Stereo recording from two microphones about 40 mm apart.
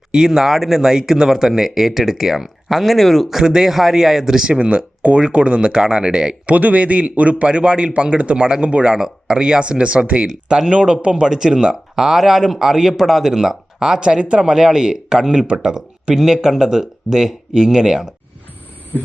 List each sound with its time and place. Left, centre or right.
0.1 s speech: centre
3.2 s speech: centre
4.4 s speech: right
6.4 s a man's voice: right
9.0 s speech: centre; by 10.2 s right
10.2 s speech: centre
10.7 s speech: right
14.0 s speech: right